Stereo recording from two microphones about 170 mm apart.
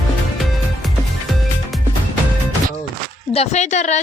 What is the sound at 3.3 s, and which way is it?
Speech, 40° left (ahead or behind).